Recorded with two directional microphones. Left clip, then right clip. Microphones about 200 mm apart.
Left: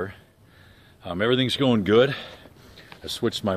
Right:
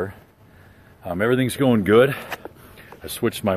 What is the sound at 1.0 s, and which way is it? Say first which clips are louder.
Speech: right 2 dB; centre (ahead or behind).